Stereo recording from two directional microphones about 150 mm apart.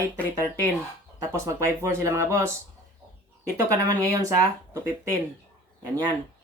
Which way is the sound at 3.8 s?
25° right (ahead or behind).